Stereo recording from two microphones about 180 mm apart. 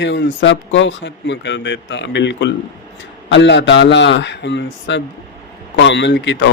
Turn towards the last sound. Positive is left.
turn(degrees=75)  # may be behind; listen again after turning